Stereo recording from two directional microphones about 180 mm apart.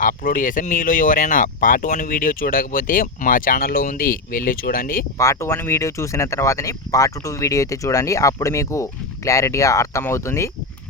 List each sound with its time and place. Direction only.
0.0 s speech: 50° left (ahead or behind)
5.1 s speech: 15° left (ahead or behind)